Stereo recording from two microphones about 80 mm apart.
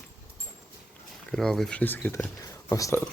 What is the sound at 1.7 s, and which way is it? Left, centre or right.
Speech, centre.